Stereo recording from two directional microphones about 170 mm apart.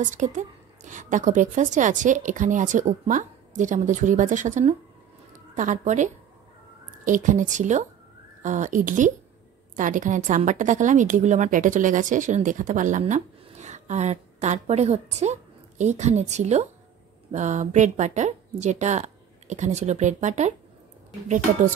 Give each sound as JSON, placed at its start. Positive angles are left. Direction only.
{"t": 0.0, "sound": "a woman's voice", "side_deg": -45}